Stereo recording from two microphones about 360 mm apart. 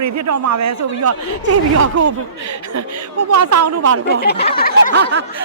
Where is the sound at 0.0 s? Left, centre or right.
Right.